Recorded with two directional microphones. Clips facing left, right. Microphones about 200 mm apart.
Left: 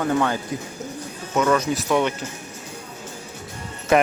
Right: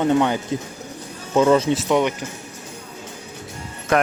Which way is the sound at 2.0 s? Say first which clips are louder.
Right 2 dB; 15° right (ahead or behind).